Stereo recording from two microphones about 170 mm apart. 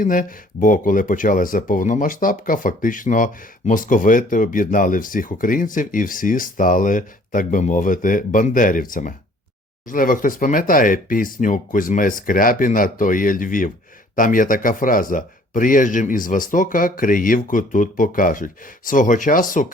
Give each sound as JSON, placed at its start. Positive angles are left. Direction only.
{"t": 0.0, "sound": "speech", "side_deg": 55}